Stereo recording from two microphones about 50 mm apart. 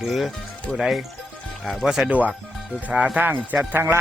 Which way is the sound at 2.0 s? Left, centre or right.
Right.